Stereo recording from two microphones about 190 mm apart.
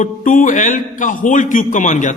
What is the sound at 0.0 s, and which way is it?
A man's voice, 45° left (ahead or behind).